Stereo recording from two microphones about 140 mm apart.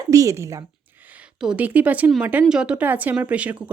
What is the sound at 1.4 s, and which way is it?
Speech, 10° right (ahead or behind).